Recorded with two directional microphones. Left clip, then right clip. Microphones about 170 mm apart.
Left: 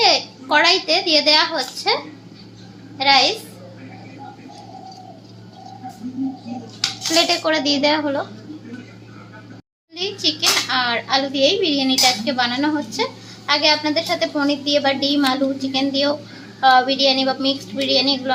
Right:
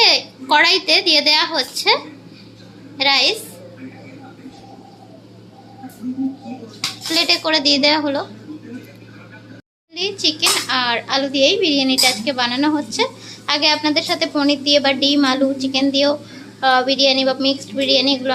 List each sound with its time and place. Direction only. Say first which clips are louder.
0.0 s a woman's voice: right 2 dB; 10° right (ahead or behind)
3.0 s a child's voice: left 1 dB; 10° right (ahead or behind)
7.1 s a woman's voice: right 1 dB; centre (ahead or behind)
9.9 s a child's voice: right 2 dB; 15° right (ahead or behind)